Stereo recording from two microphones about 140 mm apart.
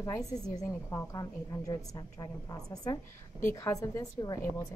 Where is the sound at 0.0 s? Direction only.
25° left (ahead or behind).